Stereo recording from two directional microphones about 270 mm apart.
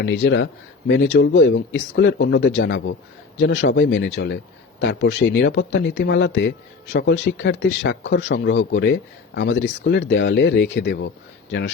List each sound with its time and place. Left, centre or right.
0.0 s speech: left